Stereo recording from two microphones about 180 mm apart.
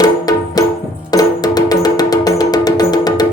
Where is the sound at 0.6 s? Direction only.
20° left (ahead or behind).